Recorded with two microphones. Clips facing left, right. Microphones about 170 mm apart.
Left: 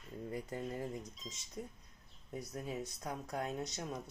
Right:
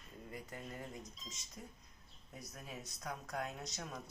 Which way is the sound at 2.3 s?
30° left (ahead or behind).